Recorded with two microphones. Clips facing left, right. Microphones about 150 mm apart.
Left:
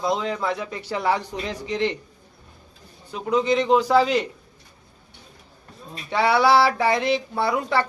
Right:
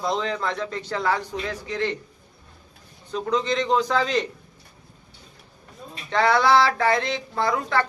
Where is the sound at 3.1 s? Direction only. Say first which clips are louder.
Left 3 dB; 10° left (ahead or behind).